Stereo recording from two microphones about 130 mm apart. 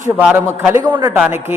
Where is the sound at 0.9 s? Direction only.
35° right (ahead or behind).